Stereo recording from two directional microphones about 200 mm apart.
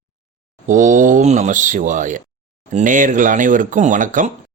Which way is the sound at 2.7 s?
40° right (ahead or behind).